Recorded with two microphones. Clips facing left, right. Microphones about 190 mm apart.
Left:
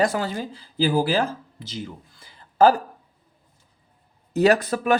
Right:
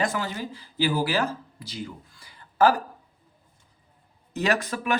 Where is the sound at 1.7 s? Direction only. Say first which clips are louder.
Left 2 dB; 25° left (ahead or behind).